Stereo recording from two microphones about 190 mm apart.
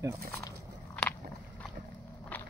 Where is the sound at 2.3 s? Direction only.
10° left (ahead or behind).